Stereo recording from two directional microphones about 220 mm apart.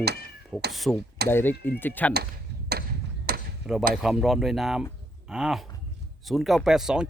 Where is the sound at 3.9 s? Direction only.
Centre (ahead or behind).